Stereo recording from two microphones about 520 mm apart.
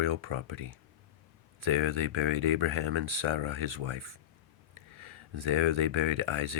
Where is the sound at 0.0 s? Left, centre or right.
Right.